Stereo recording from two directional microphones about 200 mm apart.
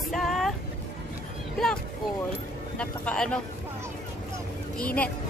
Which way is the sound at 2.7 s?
5° left (ahead or behind).